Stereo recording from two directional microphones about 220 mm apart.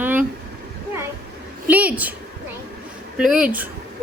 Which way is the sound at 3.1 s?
5° right (ahead or behind).